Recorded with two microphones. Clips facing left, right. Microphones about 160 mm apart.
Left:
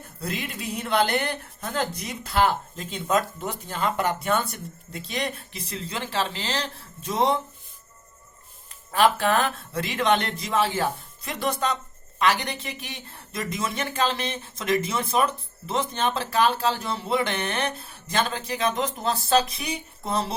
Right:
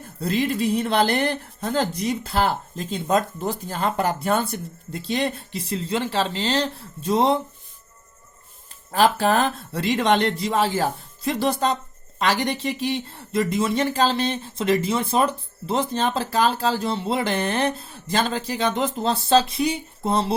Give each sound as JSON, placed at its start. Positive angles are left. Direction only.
{"t": 0.2, "sound": "speech", "side_deg": -30}
{"t": 6.1, "sound": "speech", "side_deg": -35}
{"t": 8.9, "sound": "speech", "side_deg": -35}